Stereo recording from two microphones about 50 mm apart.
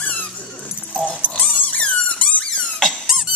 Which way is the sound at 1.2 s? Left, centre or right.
Left.